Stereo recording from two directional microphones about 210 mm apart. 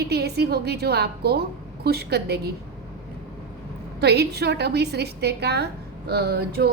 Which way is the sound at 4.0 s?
50° right (ahead or behind).